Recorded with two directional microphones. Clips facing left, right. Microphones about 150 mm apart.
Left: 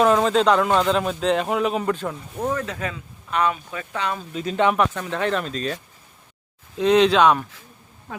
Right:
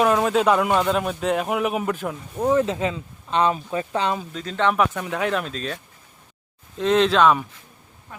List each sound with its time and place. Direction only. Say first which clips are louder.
0.0 s speech: left 1 dB; 5° right (ahead or behind)
2.5 s speech: right 9 dB; 20° right (ahead or behind)
4.4 s speech: left 4 dB; 15° left (ahead or behind)
4.9 s speech: even; 5° right (ahead or behind)